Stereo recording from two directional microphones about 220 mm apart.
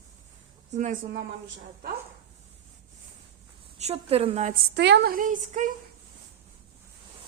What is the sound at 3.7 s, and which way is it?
Speech, 30° right (ahead or behind).